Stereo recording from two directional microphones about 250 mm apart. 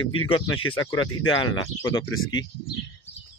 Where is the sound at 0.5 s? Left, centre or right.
Left.